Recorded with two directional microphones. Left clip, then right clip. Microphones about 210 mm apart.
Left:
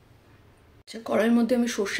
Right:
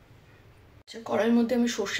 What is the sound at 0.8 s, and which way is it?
Speech, 40° left (ahead or behind).